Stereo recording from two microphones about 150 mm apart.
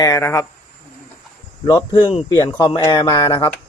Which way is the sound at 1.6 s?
30° left (ahead or behind).